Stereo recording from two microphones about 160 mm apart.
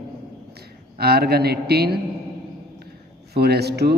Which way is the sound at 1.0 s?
75° right (ahead or behind).